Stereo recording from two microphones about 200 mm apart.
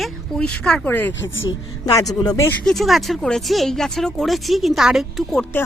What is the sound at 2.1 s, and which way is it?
Speech, 20° left (ahead or behind).